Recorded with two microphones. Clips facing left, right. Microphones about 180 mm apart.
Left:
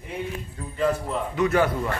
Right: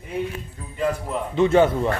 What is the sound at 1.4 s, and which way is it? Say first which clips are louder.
Speech: right 5 dB; 25° right (ahead or behind).